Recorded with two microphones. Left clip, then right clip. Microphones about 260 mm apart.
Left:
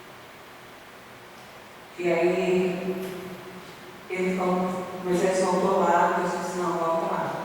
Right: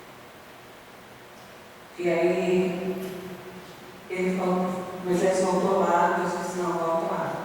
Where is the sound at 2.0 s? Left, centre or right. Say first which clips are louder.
Left 1 dB; centre.